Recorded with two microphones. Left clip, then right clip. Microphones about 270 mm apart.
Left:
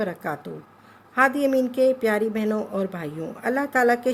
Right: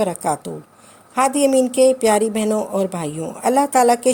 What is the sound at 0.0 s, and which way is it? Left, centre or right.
Speech, centre.